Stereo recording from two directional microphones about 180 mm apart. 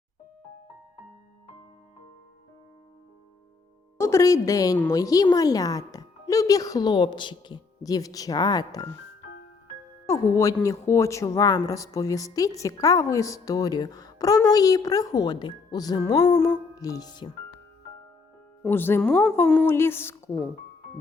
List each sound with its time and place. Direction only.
3.9 s speech: 15° left (ahead or behind)
10.1 s speech: 15° left (ahead or behind)
18.6 s speech: 10° left (ahead or behind)